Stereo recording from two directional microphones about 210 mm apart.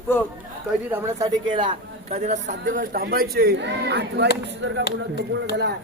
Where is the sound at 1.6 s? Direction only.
35° right (ahead or behind); by 4.8 s 55° right (ahead or behind).